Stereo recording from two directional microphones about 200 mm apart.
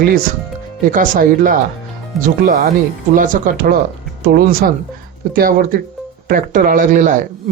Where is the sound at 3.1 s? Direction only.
45° right (ahead or behind).